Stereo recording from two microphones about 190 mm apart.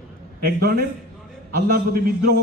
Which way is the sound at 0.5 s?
55° right (ahead or behind).